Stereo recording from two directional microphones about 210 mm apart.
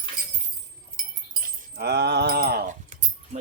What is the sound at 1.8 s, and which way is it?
Keys jangling, 50° right (ahead or behind).